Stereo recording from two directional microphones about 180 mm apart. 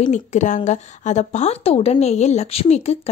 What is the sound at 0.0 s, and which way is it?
A woman's voice, 40° left (ahead or behind).